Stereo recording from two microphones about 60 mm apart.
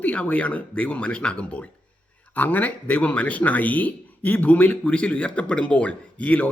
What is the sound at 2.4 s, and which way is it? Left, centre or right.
Speech, left.